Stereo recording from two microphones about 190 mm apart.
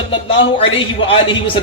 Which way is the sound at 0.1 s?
25° left (ahead or behind).